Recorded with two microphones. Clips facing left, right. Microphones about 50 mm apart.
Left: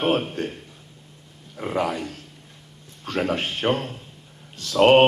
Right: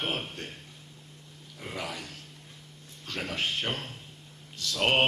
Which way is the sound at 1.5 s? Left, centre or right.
Left.